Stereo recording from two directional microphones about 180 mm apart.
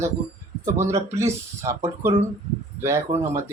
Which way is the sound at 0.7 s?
15° right (ahead or behind).